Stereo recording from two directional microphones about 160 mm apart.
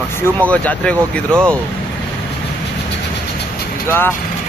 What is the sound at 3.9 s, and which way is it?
Speech, 15° left (ahead or behind).